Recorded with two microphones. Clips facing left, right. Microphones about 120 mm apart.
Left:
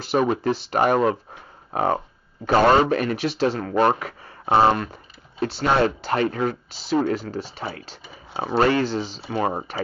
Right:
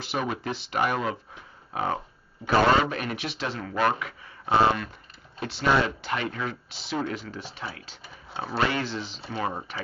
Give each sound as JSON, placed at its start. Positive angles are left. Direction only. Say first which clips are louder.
{"t": 0.0, "sound": "speech", "louder": "left 9 dB", "side_deg": 40}
{"t": 8.0, "sound": "a sound", "louder": "left 2 dB", "side_deg": 0}
{"t": 8.5, "sound": "speech", "louder": "left 8 dB", "side_deg": 40}
{"t": 9.5, "sound": "speech", "louder": "left 6 dB", "side_deg": 50}